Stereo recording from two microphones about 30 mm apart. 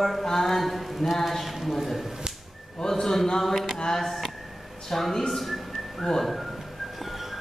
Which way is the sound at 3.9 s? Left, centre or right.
Centre.